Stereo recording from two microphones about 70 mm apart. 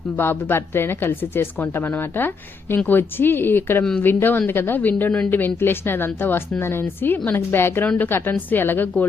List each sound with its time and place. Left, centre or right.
0.2 s a woman's voice: left